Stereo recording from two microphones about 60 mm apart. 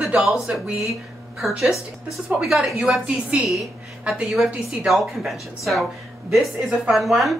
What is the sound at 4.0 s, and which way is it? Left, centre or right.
Speech, centre.